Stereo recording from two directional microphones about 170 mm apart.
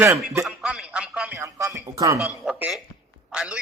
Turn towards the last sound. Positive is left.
turn(degrees=-5)  # may be behind; listen again after turning